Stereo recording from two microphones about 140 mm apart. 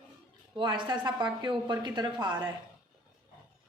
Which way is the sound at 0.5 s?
35° right (ahead or behind).